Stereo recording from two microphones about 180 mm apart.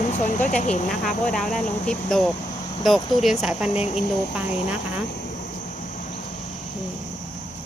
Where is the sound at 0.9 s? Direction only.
Centre (ahead or behind).